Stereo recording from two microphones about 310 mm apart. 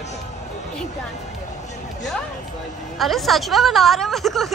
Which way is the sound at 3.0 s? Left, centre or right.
Centre.